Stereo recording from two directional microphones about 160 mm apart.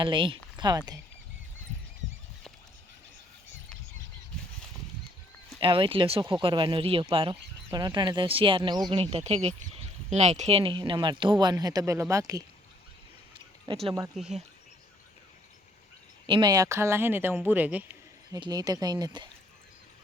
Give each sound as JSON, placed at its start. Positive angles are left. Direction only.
{"t": 0.0, "sound": "speech", "side_deg": -30}
{"t": 5.5, "sound": "speech", "side_deg": -30}
{"t": 14.2, "sound": "speech", "side_deg": 0}
{"t": 16.2, "sound": "speech", "side_deg": -30}
{"t": 18.3, "sound": "speech", "side_deg": -25}